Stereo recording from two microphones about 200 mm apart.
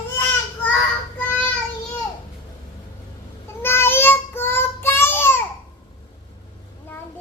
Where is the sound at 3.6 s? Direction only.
10° left (ahead or behind).